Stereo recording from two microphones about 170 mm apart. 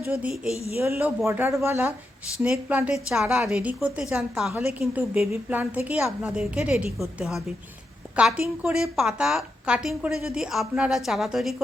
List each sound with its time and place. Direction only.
0.0 s a woman's voice: 10° right (ahead or behind)